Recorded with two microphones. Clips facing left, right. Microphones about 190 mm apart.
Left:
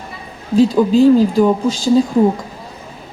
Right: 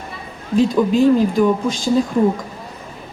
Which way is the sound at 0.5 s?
30° left (ahead or behind).